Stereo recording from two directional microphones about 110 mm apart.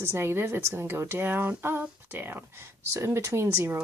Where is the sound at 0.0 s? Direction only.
25° right (ahead or behind).